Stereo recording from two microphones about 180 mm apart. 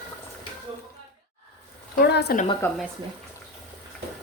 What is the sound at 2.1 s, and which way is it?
Speech, 65° left (ahead or behind).